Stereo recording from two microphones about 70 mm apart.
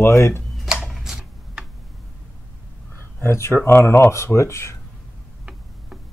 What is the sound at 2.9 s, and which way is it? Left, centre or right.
Speech, left.